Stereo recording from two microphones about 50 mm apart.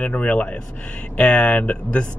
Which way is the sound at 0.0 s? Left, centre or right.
Left.